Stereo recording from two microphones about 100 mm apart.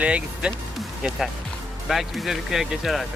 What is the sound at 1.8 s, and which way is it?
Speech, centre (ahead or behind).